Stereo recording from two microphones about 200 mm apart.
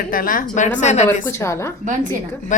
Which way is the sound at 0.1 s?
45° left (ahead or behind).